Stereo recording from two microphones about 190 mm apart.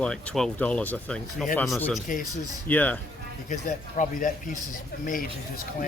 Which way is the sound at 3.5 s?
40° left (ahead or behind).